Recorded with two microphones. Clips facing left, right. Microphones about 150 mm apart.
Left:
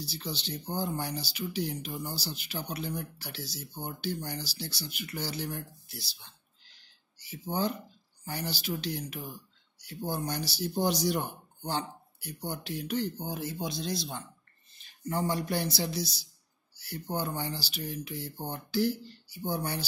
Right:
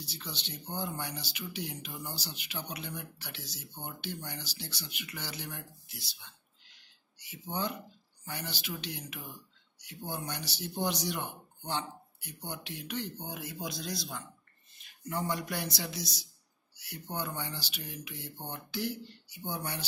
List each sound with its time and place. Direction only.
0.0 s speech: 35° left (ahead or behind)